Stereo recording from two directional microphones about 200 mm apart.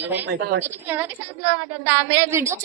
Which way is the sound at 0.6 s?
10° right (ahead or behind).